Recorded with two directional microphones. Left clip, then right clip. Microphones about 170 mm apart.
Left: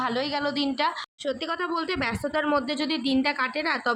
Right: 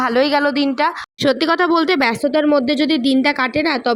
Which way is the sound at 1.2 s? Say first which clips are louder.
Right 15 dB; 50° right (ahead or behind).